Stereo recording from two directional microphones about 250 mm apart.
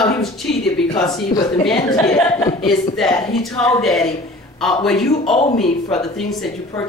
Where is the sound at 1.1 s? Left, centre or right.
Centre.